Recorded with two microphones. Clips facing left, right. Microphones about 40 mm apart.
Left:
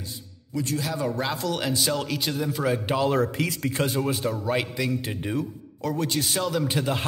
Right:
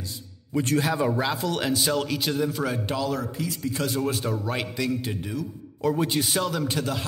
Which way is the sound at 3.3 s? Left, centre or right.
Left.